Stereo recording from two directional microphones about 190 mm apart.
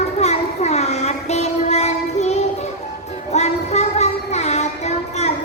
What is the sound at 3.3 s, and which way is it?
Music, 35° left (ahead or behind).